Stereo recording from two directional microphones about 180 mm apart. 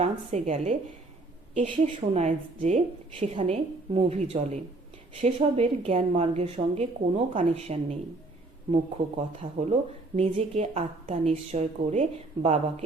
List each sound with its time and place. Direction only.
0.0 s a woman's voice: 40° right (ahead or behind)
1.9 s a woman's voice: 40° right (ahead or behind)
9.4 s a woman's voice: 40° right (ahead or behind)